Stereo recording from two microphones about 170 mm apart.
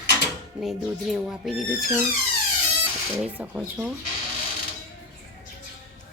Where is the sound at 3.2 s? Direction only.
10° right (ahead or behind).